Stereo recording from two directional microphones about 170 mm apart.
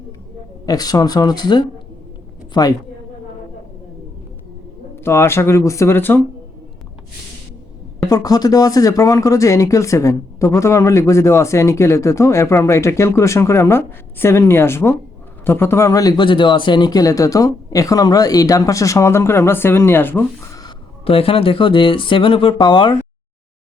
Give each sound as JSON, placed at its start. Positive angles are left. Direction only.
{"t": 0.6, "sound": "a man's voice", "side_deg": 20}
{"t": 5.0, "sound": "speech", "side_deg": 15}
{"t": 8.1, "sound": "speech", "side_deg": 25}
{"t": 20.7, "sound": "speech", "side_deg": 35}